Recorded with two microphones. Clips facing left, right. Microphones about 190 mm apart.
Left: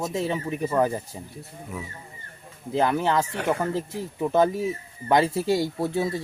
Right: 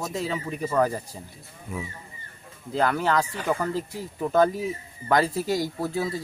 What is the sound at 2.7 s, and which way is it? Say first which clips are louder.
Speech: left 1 dB; 20° left (ahead or behind).